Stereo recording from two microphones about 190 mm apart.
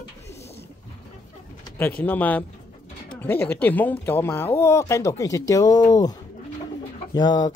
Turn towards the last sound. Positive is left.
turn(degrees=20)  # may be behind; listen again after turning